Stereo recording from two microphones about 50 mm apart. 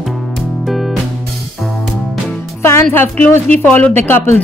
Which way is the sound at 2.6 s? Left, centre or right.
Left.